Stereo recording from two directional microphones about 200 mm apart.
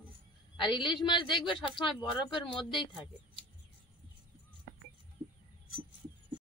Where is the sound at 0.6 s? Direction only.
25° left (ahead or behind).